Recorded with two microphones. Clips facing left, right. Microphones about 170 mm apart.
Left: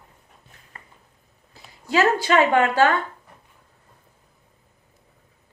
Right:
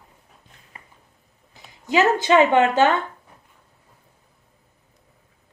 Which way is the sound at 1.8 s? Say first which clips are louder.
Right 1 dB; 20° right (ahead or behind).